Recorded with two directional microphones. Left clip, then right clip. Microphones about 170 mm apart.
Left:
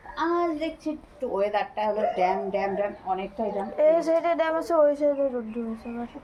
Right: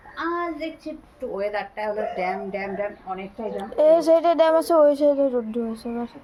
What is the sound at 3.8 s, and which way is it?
Speech, 60° right (ahead or behind).